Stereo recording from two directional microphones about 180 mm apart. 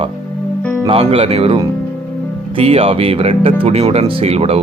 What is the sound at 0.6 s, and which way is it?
Music, 10° left (ahead or behind).